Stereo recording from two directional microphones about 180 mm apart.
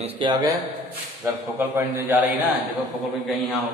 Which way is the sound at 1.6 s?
10° right (ahead or behind).